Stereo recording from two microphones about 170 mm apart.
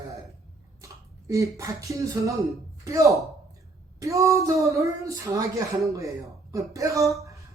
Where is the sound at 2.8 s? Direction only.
20° right (ahead or behind).